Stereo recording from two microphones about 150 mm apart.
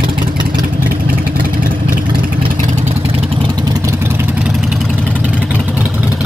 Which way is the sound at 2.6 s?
50° right (ahead or behind).